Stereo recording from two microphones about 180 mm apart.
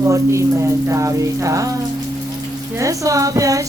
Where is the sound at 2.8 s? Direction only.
20° right (ahead or behind).